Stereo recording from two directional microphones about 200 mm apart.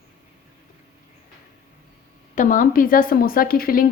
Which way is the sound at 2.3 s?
40° left (ahead or behind).